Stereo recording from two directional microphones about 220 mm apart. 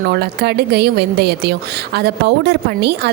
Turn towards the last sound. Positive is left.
turn(degrees=-50)  # may be behind; listen again after turning